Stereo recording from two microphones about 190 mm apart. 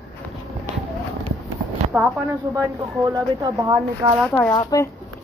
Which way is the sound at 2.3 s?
15° right (ahead or behind).